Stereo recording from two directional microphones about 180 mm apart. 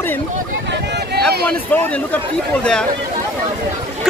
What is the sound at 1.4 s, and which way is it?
Speech, 10° left (ahead or behind).